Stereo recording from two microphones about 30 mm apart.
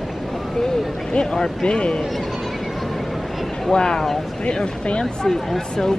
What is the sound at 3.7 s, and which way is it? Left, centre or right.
Speech, left.